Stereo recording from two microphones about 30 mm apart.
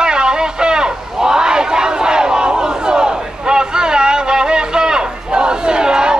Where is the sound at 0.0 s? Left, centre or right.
Right.